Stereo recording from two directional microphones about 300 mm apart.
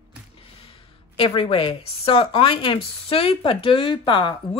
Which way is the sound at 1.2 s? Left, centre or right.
Centre.